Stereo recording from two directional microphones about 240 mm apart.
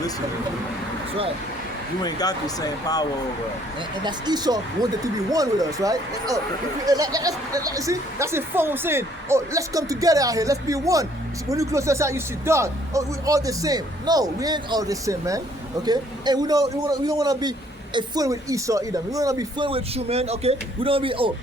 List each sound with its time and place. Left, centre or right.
2.0 s speech: centre
3.8 s speech: centre